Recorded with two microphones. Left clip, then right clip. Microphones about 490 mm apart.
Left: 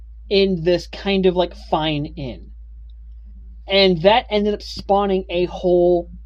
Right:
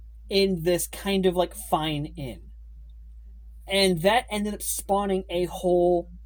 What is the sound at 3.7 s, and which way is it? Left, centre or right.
Speech, right.